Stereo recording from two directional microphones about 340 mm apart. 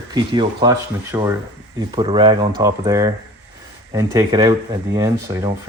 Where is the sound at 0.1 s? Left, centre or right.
Centre.